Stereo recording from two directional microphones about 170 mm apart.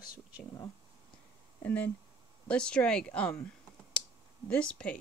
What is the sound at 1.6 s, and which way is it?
Speech, 10° left (ahead or behind).